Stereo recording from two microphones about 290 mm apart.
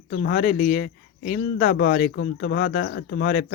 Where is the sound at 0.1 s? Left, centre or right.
Left.